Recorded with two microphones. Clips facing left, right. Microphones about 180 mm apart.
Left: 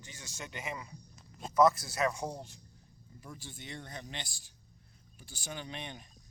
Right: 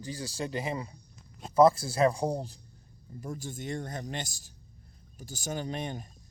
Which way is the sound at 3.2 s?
45° right (ahead or behind).